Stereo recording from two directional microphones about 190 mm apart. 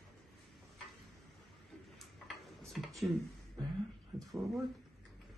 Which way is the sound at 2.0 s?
Centre (ahead or behind).